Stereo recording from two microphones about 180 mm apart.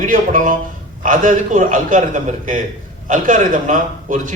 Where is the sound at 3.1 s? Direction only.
45° right (ahead or behind).